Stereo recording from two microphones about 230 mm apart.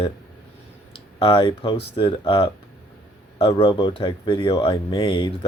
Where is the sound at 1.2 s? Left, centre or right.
Left.